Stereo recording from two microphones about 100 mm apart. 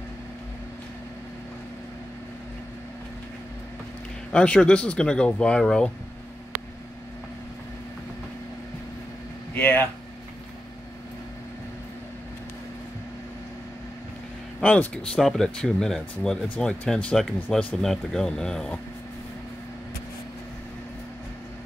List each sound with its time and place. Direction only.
4.3 s speech: 10° left (ahead or behind)
9.5 s speech: 20° left (ahead or behind)
14.6 s speech: 15° left (ahead or behind)
15.1 s speech: 5° left (ahead or behind)